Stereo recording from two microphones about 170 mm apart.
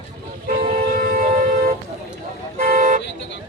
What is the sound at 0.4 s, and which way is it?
Vehicle, 60° right (ahead or behind).